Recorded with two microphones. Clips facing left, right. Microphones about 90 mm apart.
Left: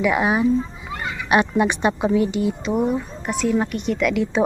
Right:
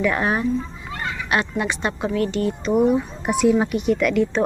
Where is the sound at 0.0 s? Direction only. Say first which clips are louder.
Left 2 dB; 10° left (ahead or behind).